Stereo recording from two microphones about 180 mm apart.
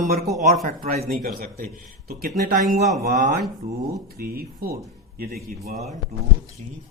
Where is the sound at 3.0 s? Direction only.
45° right (ahead or behind).